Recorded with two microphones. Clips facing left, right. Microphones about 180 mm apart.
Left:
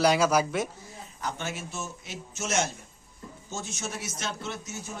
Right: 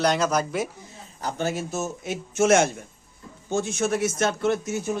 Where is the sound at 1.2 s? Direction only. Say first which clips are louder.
Right 7 dB; 35° right (ahead or behind); by 4.8 s 55° right (ahead or behind).